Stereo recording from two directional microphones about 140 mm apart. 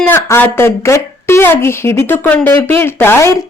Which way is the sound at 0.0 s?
15° left (ahead or behind).